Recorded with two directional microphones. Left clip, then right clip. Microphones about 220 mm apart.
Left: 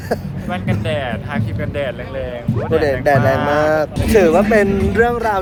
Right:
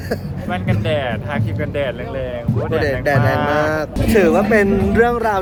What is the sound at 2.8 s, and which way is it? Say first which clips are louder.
Speech: left 3 dB; centre (ahead or behind).